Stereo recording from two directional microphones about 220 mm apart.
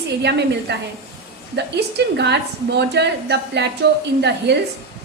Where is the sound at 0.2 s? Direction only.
50° right (ahead or behind).